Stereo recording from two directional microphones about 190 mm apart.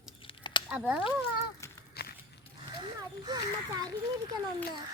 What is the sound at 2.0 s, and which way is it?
Walk, 55° left (ahead or behind).